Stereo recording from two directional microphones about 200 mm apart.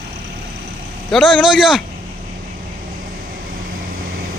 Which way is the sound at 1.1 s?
Centre (ahead or behind).